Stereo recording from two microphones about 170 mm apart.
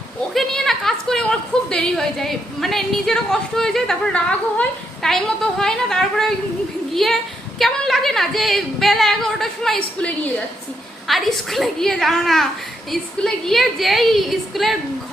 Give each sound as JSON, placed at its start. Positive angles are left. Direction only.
{"t": 0.3, "sound": "a woman's voice", "side_deg": 0}